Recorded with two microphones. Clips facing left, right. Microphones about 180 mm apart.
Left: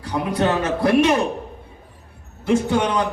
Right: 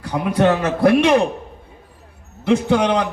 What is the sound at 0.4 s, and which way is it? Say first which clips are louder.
Speech: right 5 dB; 60° right (ahead or behind).